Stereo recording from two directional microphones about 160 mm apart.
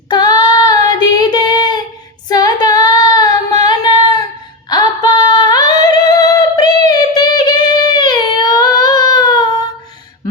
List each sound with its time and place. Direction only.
0.1 s child singing: 25° left (ahead or behind)
4.7 s singing: 25° left (ahead or behind)